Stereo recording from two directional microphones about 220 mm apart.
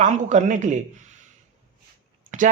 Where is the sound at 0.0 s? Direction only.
35° right (ahead or behind).